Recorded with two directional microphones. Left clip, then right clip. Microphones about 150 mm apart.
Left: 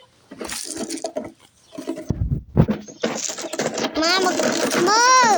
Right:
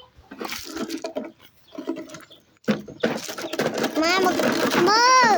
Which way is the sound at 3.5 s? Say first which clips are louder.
Even; 15° right (ahead or behind).